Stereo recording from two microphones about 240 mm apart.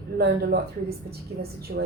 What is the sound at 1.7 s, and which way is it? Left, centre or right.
Speech, right.